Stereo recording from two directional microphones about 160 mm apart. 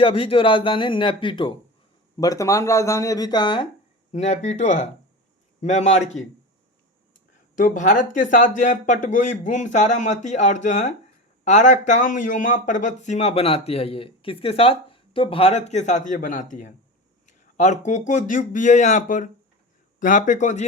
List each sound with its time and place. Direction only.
0.0 s speech: 35° left (ahead or behind)
2.1 s speech: 20° left (ahead or behind)
4.1 s speech: 45° left (ahead or behind)
7.5 s speech: 55° left (ahead or behind)